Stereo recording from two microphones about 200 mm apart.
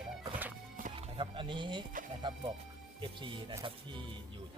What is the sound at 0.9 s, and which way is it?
Music, 25° right (ahead or behind).